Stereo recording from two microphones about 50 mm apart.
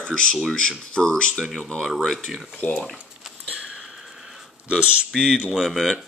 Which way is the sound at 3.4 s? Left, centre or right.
Right.